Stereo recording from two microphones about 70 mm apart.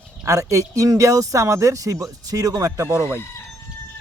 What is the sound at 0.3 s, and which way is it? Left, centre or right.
Speech, right.